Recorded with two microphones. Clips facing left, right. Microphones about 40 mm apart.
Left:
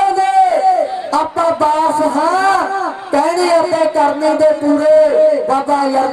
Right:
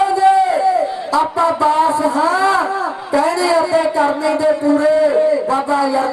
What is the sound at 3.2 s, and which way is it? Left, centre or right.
A man's voice, centre.